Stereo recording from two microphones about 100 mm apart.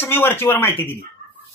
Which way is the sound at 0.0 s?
20° left (ahead or behind).